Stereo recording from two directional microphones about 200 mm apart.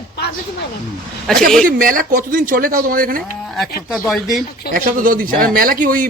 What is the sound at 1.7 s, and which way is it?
Speech, 45° right (ahead or behind).